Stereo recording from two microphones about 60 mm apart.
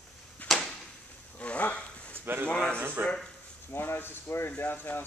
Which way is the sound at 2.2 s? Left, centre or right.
Right.